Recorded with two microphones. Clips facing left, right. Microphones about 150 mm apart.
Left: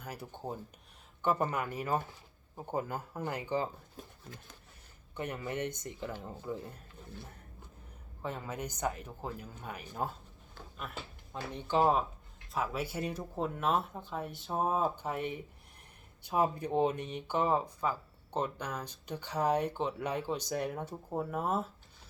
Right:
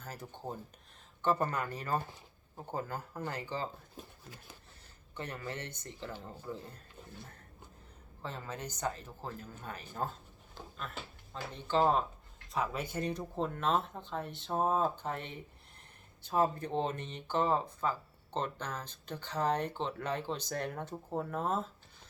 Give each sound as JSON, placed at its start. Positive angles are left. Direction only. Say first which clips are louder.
{"t": 0.0, "sound": "speech", "louder": "left 2 dB", "side_deg": 15}
{"t": 5.1, "sound": "speech", "louder": "left 4 dB", "side_deg": 15}
{"t": 8.2, "sound": "speech", "louder": "left 3 dB", "side_deg": 10}